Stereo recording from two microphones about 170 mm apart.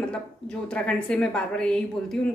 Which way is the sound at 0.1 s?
5° left (ahead or behind).